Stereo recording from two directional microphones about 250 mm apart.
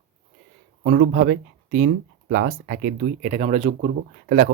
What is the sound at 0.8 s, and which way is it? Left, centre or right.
Speech, right.